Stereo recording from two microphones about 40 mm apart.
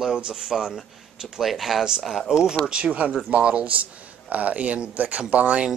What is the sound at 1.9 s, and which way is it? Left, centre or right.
Speech, centre.